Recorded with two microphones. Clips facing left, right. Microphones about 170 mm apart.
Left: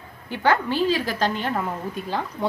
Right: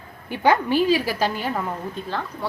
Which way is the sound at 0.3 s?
15° right (ahead or behind).